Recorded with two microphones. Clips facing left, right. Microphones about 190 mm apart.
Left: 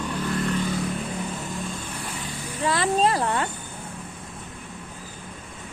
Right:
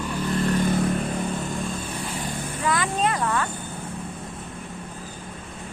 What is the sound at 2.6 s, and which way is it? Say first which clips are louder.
Insect: left 3 dB; 30° left (ahead or behind).